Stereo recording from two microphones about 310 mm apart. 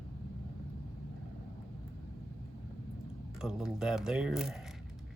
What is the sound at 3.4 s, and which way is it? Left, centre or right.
Speech, centre.